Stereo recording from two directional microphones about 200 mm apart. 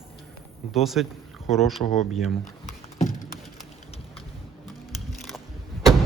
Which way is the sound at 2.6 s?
40° left (ahead or behind).